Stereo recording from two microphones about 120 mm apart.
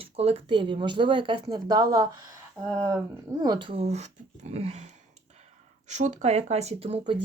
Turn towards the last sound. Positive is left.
turn(degrees=-60)  # may be behind; listen again after turning